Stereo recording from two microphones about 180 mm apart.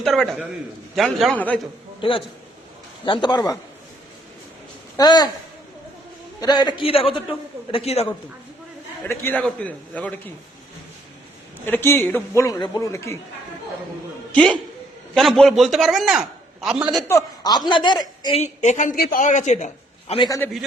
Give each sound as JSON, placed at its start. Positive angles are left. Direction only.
{"t": 0.0, "sound": "a man's voice", "side_deg": 0}
{"t": 2.0, "sound": "a man's voice", "side_deg": 30}
{"t": 4.9, "sound": "a man's voice", "side_deg": 20}
{"t": 6.4, "sound": "a man's voice", "side_deg": 25}
{"t": 9.0, "sound": "a man's voice", "side_deg": 10}
{"t": 11.6, "sound": "a man's voice", "side_deg": 10}
{"t": 14.3, "sound": "a man's voice", "side_deg": 5}
{"t": 17.1, "sound": "a man's voice", "side_deg": 20}
{"t": 18.3, "sound": "a man's voice", "side_deg": 40}
{"t": 20.1, "sound": "a man's voice", "side_deg": 25}